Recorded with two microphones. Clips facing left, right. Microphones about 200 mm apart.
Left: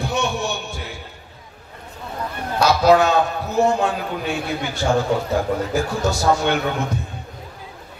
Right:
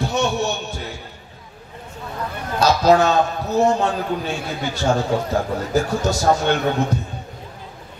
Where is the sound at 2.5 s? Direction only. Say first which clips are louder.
Even; 40° right (ahead or behind).